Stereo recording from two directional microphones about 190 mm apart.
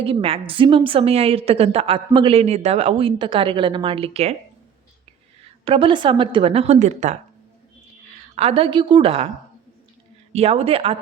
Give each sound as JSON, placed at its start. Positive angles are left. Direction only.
{"t": 0.0, "sound": "a woman's voice", "side_deg": -30}
{"t": 5.4, "sound": "a woman's voice", "side_deg": -30}
{"t": 8.4, "sound": "a woman's voice", "side_deg": -30}
{"t": 10.3, "sound": "speech", "side_deg": -30}